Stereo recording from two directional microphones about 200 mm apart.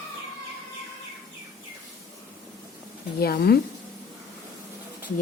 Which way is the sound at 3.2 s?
50° left (ahead or behind).